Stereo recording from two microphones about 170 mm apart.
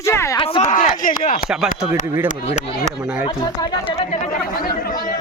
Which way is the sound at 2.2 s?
45° left (ahead or behind).